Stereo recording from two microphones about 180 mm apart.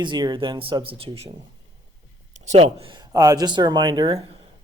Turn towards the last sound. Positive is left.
turn(degrees=-25)  # may be behind; listen again after turning